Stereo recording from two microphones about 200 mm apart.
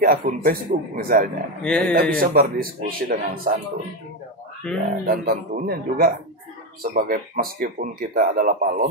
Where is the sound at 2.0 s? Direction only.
45° right (ahead or behind).